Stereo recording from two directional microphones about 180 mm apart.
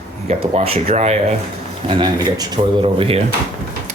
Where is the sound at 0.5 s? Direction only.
35° right (ahead or behind).